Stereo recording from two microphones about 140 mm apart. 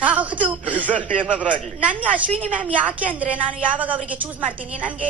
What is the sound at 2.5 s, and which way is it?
A woman's voice, 10° right (ahead or behind).